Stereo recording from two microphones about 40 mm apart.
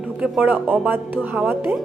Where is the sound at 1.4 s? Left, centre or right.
Right.